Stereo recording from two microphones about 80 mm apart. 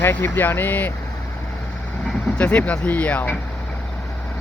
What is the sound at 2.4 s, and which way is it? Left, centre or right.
Speech, centre.